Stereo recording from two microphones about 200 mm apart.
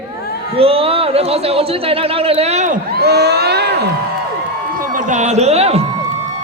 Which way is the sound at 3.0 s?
55° right (ahead or behind).